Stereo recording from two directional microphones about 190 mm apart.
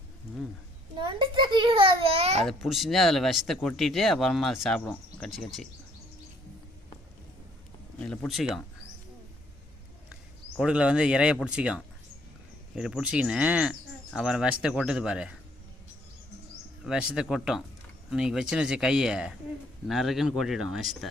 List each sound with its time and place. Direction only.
0.9 s a child's voice: 25° right (ahead or behind)
2.4 s speech: centre (ahead or behind)
7.9 s speech: 5° left (ahead or behind)
10.6 s speech: 5° right (ahead or behind)
16.8 s speech: 5° right (ahead or behind)